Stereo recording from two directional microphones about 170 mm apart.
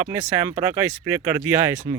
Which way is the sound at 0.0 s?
10° right (ahead or behind).